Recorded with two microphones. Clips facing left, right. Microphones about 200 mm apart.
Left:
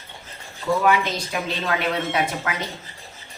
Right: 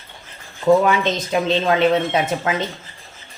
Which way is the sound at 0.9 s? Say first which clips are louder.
Right 2 dB; 25° right (ahead or behind).